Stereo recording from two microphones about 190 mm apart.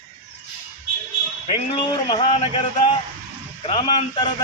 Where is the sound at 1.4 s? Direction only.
25° left (ahead or behind).